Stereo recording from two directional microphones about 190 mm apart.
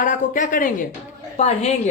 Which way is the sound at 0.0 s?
40° left (ahead or behind).